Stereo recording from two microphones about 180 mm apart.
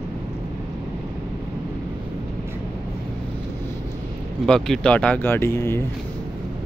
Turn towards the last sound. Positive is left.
turn(degrees=15)  # may be behind; listen again after turning